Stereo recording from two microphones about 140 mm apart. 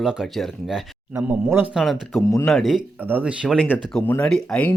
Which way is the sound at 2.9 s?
15° right (ahead or behind).